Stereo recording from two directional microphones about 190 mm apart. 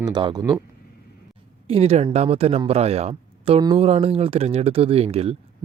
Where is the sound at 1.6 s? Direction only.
30° right (ahead or behind).